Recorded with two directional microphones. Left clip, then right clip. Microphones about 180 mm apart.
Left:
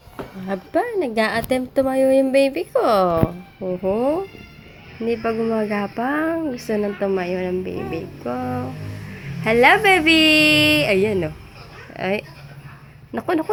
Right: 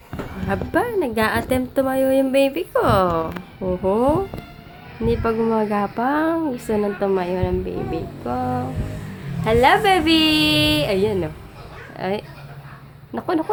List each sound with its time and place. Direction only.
0.4 s a woman's voice: centre (ahead or behind)
3.6 s speech: 10° right (ahead or behind)
5.2 s a woman's voice: centre (ahead or behind)
9.4 s a woman's voice: 20° left (ahead or behind)
13.1 s a sound: 20° left (ahead or behind)